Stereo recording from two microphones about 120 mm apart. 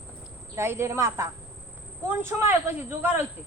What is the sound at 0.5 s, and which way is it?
Speech, 20° right (ahead or behind).